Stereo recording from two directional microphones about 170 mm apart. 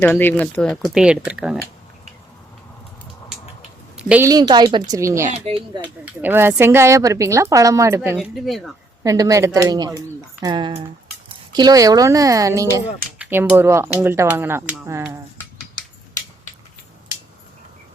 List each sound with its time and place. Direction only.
0.0 s speech: 10° left (ahead or behind); by 1.5 s 5° right (ahead or behind)
3.9 s a sound: 5° right (ahead or behind)
4.3 s speech: 25° right (ahead or behind)
5.3 s speech: 35° right (ahead or behind)
6.2 s a woman's voice: 15° right (ahead or behind)
8.1 s speech: centre (ahead or behind)
9.0 s a woman's voice: 20° right (ahead or behind)